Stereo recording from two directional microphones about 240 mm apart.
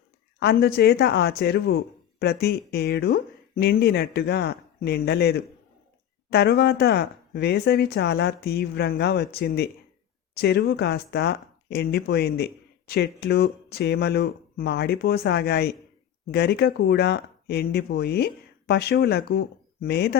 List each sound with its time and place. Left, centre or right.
0.3 s speech: left